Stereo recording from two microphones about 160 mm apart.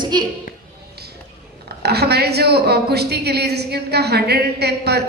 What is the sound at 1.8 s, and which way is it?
A woman's voice, 90° right.